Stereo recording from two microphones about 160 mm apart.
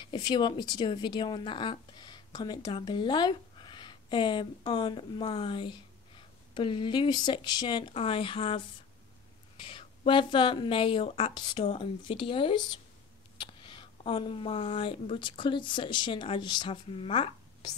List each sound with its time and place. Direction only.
0.0 s speech: 30° left (ahead or behind)